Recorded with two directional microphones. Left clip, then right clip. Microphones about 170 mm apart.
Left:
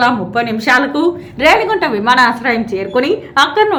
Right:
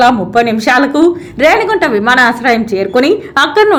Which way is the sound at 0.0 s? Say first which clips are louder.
Right 5 dB; 25° right (ahead or behind).